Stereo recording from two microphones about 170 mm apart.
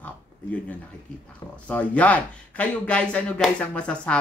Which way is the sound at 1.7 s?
10° left (ahead or behind).